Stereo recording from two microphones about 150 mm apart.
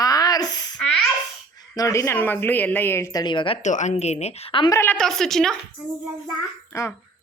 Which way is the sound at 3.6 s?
55° left (ahead or behind).